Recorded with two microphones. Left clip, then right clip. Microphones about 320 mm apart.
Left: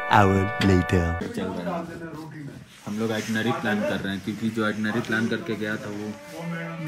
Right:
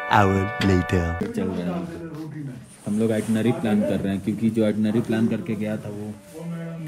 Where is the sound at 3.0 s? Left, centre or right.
Right.